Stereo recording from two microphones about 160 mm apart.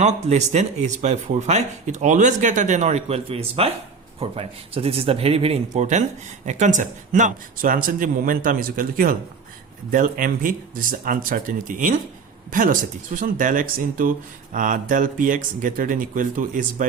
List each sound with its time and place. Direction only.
0.0 s speech: 45° right (ahead or behind)